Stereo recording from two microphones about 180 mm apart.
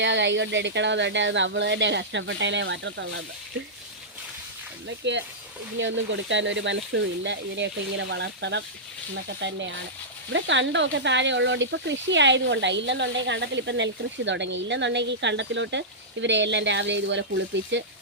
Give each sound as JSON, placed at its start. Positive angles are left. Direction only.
{"t": 0.0, "sound": "speech", "side_deg": -90}
{"t": 5.0, "sound": "speech", "side_deg": -75}
{"t": 5.7, "sound": "speech", "side_deg": -90}
{"t": 9.4, "sound": "speech", "side_deg": -90}